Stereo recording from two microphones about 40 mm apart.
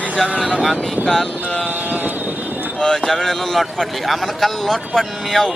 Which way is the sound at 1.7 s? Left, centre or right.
Right.